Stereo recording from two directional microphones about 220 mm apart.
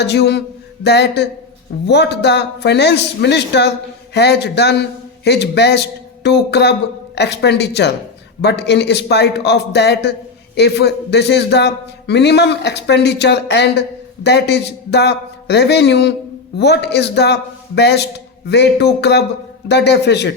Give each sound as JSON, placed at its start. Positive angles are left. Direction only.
{"t": 0.0, "sound": "a man's voice", "side_deg": 50}